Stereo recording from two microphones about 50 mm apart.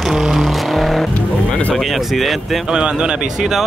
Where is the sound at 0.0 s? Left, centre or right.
Centre.